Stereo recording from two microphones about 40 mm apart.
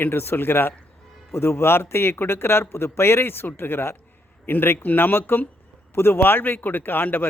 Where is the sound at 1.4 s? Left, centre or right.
Left.